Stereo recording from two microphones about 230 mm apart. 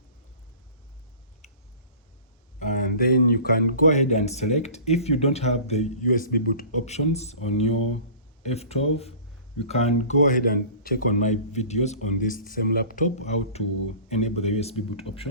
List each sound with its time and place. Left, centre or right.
2.6 s speech: left